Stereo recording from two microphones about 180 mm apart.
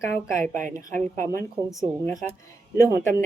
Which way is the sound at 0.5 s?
45° right (ahead or behind).